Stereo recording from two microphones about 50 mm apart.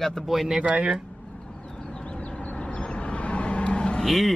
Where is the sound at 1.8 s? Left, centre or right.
Centre.